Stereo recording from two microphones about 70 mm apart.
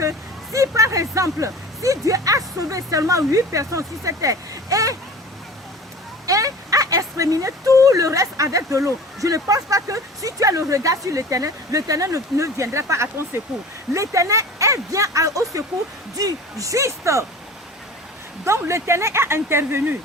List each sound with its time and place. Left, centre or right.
0.5 s speech: right
6.2 s a sound: right
7.8 s speech: right
18.4 s speech: right